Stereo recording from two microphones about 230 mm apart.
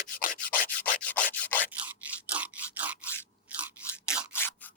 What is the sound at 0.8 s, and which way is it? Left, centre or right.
Rub, centre.